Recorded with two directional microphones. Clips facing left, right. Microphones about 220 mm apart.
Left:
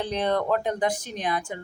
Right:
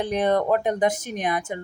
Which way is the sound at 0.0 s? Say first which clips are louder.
Right 4 dB; 20° right (ahead or behind).